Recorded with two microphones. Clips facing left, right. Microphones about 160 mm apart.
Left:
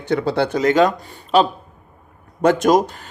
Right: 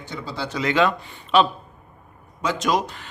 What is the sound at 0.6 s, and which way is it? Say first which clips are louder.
Speech: left 3 dB; 40° left (ahead or behind).